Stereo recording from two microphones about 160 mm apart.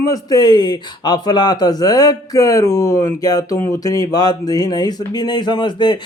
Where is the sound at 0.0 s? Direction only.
25° left (ahead or behind).